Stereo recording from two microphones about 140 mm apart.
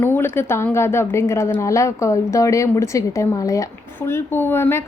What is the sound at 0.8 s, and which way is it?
A woman's voice, 20° left (ahead or behind).